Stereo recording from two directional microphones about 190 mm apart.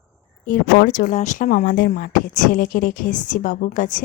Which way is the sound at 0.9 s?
45° left (ahead or behind).